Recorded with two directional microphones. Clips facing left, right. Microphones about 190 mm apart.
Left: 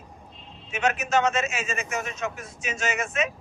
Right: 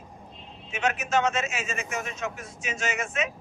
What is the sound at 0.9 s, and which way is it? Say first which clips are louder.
A man's voice: left 2 dB; 45° left (ahead or behind).